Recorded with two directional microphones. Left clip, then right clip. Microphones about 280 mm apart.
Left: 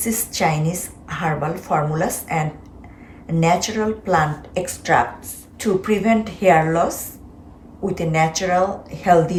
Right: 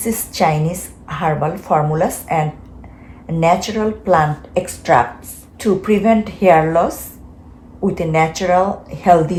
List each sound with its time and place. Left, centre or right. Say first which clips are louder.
0.0 s a woman's voice: right 4 dB; centre